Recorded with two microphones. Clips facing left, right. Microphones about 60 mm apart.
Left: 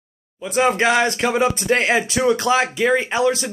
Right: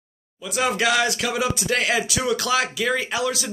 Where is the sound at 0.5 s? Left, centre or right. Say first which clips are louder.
Left 4 dB; left.